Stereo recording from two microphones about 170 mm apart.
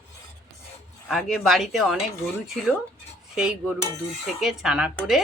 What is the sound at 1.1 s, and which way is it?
Speech, centre (ahead or behind).